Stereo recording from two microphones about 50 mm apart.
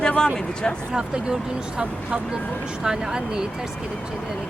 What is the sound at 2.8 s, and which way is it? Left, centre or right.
Speech, centre.